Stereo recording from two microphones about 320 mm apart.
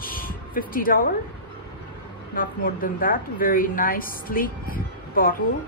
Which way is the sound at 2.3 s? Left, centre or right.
Left.